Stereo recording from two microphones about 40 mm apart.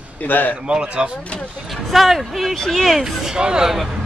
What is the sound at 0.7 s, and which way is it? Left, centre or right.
Speech, right.